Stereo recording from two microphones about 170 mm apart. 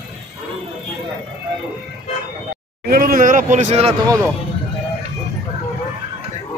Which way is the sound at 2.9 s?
60° right (ahead or behind).